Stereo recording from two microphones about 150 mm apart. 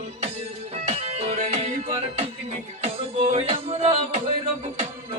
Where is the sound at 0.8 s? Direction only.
45° right (ahead or behind).